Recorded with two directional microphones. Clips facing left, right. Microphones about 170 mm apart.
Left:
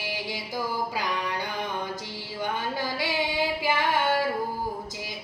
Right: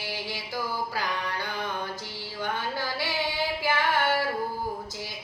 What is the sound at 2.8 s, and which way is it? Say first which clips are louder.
Female singing: left 2 dB; 15° left (ahead or behind).